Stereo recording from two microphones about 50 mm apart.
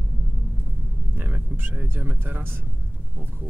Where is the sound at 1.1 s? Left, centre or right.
Right.